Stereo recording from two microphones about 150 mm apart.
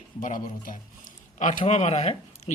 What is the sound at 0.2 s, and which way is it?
Speech, 65° left (ahead or behind).